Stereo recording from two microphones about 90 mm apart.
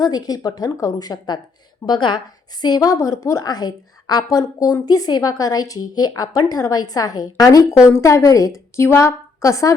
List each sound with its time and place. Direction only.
0.0 s a woman's voice: 50° left (ahead or behind)
1.9 s a woman's voice: 60° left (ahead or behind); by 7.8 s 45° left (ahead or behind)
7.9 s a woman's voice: 35° left (ahead or behind)